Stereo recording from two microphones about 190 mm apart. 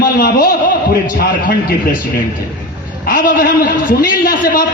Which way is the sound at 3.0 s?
45° left (ahead or behind).